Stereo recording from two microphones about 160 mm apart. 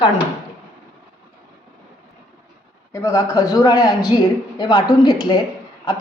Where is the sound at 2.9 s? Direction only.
20° left (ahead or behind).